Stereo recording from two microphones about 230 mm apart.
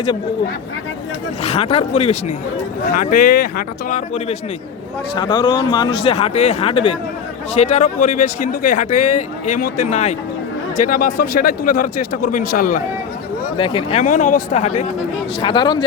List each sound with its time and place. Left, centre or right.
1.4 s speech: left
5.1 s speech: centre; by 12.8 s left
13.6 s speech: left
14.0 s speech: left
15.4 s speech: left